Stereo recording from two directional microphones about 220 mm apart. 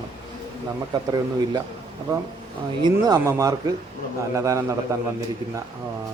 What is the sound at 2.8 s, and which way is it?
A man's voice, 15° right (ahead or behind).